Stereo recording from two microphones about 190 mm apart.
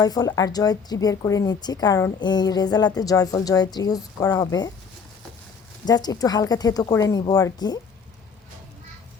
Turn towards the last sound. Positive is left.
turn(degrees=20)  # may be behind; listen again after turning